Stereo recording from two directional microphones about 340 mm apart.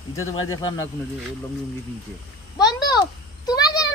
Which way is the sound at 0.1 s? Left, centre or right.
Left.